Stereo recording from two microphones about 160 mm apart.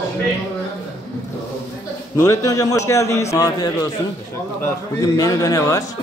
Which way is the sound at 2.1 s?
20° left (ahead or behind).